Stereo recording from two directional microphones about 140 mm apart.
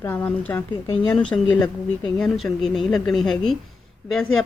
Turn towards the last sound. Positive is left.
turn(degrees=5)  # may be behind; listen again after turning